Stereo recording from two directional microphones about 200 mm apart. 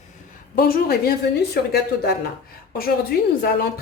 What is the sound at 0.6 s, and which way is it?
A woman's voice, 50° left (ahead or behind).